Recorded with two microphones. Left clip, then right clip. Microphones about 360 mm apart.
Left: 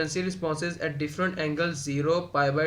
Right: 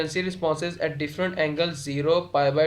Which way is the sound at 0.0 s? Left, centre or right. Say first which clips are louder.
Right 3 dB; centre.